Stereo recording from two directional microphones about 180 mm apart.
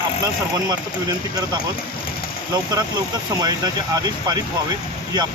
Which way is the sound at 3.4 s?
20° right (ahead or behind).